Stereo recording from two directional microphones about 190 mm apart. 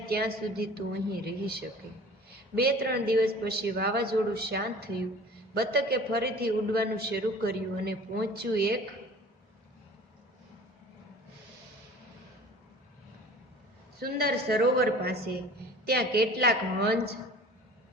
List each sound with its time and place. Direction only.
0.0 s a man's voice: 55° right (ahead or behind)
14.0 s a man's voice: 55° right (ahead or behind)